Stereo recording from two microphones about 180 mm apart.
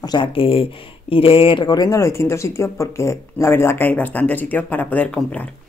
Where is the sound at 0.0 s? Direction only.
25° left (ahead or behind).